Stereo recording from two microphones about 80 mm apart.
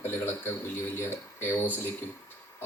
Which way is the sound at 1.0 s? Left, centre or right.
Left.